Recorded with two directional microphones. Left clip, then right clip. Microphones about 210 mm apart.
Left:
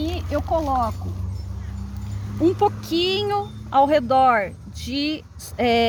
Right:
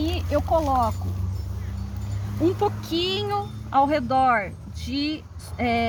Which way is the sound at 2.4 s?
35° left (ahead or behind).